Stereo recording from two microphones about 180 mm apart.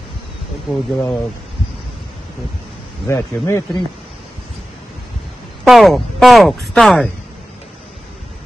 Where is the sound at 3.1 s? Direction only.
15° left (ahead or behind).